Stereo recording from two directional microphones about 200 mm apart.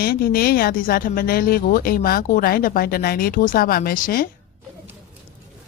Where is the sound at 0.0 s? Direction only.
50° left (ahead or behind).